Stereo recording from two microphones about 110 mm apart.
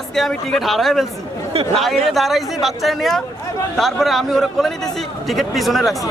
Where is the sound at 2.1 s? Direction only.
Centre (ahead or behind).